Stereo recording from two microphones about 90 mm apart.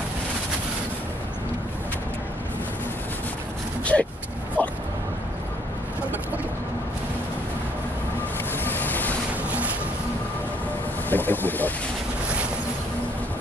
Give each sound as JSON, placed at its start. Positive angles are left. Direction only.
{"t": 3.8, "sound": "speech", "side_deg": 15}
{"t": 4.6, "sound": "a sound", "side_deg": 20}
{"t": 8.6, "sound": "vehicle", "side_deg": 20}
{"t": 11.1, "sound": "boat", "side_deg": 20}